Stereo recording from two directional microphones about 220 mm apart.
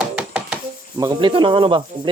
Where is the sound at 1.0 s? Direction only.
20° right (ahead or behind).